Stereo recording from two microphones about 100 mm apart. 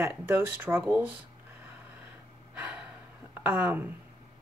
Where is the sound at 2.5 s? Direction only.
15° right (ahead or behind).